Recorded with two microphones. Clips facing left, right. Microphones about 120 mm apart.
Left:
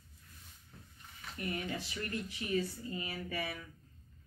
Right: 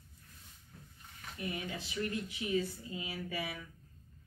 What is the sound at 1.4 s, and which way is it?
Speech, 20° right (ahead or behind).